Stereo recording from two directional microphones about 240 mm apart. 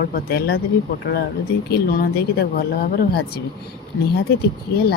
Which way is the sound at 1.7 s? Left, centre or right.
Left.